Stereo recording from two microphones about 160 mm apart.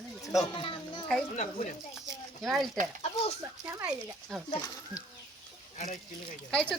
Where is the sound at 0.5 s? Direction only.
30° left (ahead or behind).